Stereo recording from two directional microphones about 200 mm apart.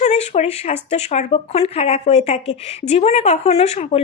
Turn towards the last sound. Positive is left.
turn(degrees=30)  # may be behind; listen again after turning